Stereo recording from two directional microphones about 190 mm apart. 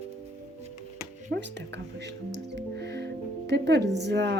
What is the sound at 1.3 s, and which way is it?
Music, 65° right (ahead or behind).